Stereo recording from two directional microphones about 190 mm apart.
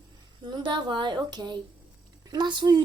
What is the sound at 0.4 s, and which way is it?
A woman's voice, 25° right (ahead or behind).